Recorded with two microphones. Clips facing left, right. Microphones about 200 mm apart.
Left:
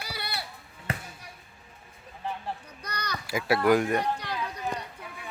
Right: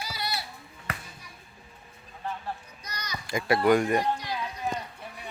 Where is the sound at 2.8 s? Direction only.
60° left (ahead or behind).